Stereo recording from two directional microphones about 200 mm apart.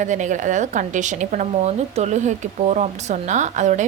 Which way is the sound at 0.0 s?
40° right (ahead or behind).